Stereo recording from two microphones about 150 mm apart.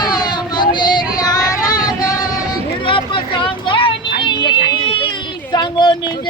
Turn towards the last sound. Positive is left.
turn(degrees=30)  # may be behind; listen again after turning